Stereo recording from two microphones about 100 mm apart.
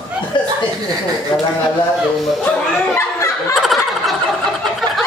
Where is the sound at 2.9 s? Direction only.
30° left (ahead or behind).